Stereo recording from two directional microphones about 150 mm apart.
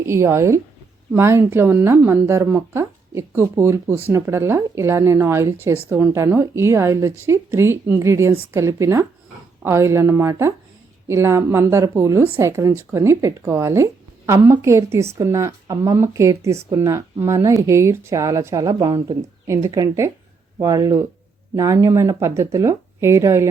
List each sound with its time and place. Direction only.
0.0 s a woman's voice: 20° right (ahead or behind)